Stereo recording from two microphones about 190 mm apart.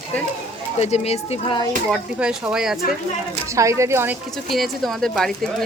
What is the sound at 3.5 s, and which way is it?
Speech, 15° right (ahead or behind).